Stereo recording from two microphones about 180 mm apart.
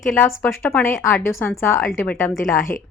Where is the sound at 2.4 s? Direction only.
50° left (ahead or behind).